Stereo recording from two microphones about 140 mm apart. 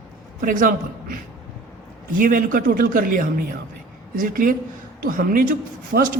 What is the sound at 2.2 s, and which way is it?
A man's voice, 80° right.